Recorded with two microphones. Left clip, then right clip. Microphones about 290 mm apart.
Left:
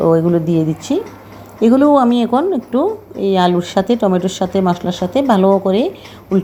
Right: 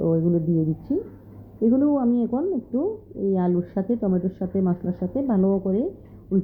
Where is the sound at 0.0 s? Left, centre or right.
Centre.